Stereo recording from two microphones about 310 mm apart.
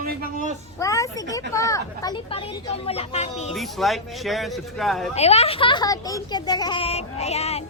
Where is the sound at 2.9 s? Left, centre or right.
Centre.